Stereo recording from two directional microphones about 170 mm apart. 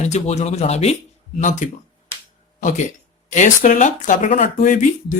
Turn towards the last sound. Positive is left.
turn(degrees=50)  # may be behind; listen again after turning